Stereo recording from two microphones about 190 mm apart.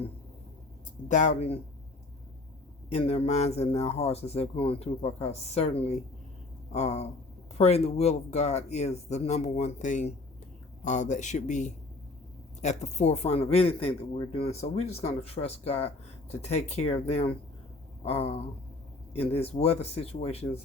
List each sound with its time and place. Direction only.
1.0 s speech: 40° left (ahead or behind)
2.9 s speech: 30° left (ahead or behind)